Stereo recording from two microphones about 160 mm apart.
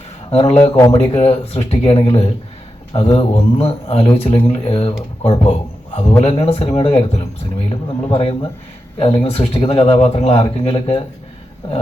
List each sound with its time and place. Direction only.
0.3 s speech: 40° left (ahead or behind)